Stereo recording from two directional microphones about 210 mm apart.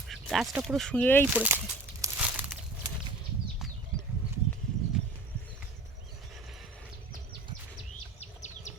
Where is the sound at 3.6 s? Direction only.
Centre (ahead or behind).